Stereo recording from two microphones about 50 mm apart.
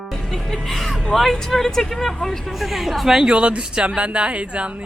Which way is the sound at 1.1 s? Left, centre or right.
Centre.